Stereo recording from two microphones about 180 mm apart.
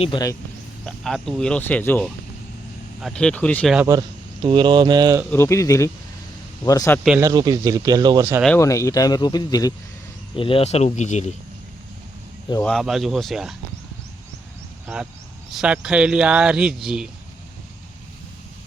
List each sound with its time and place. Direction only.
0.0 s speech: 25° left (ahead or behind)
0.9 s speech: centre (ahead or behind)
4.4 s speech: 25° right (ahead or behind)
5.3 s speech: 15° left (ahead or behind)
7.2 s speech: 20° right (ahead or behind)
8.5 s speech: 15° left (ahead or behind); by 11.3 s 40° left (ahead or behind)
12.6 s speech: centre (ahead or behind)
15.5 s speech: 5° right (ahead or behind)